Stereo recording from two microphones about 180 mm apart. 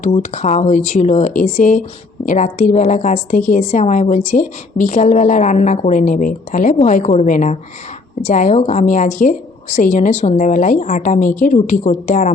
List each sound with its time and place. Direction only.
0.0 s a woman's voice: 40° left (ahead or behind)